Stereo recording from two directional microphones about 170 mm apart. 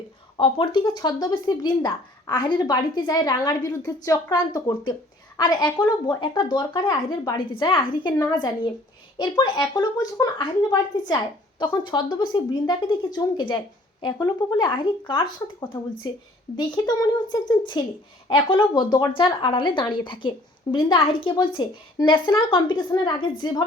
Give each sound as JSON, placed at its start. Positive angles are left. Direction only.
{"t": 0.3, "sound": "speech", "side_deg": 30}